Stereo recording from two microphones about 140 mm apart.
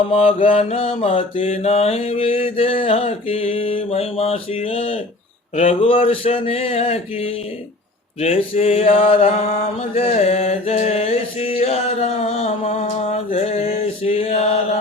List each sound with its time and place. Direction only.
0.1 s mantra: 45° left (ahead or behind)